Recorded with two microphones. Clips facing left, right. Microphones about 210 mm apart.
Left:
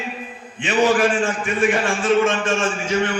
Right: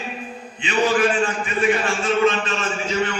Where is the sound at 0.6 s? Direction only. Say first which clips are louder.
Left 2 dB; 50° left (ahead or behind).